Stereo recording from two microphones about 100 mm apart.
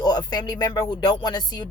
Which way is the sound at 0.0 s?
40° left (ahead or behind).